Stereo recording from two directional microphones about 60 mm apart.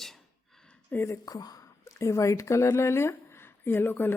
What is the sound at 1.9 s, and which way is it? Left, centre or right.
Speech, left.